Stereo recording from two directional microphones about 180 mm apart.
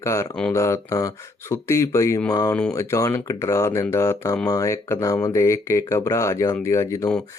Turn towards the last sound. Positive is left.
turn(degrees=15)  # may be behind; listen again after turning